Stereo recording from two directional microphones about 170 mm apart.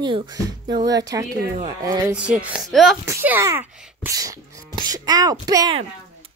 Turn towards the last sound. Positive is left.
turn(degrees=-20)  # may be behind; listen again after turning